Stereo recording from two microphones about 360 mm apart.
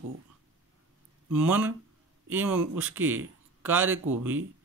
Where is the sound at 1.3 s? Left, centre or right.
Centre.